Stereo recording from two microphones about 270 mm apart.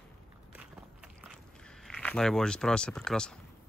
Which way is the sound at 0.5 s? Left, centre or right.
Centre.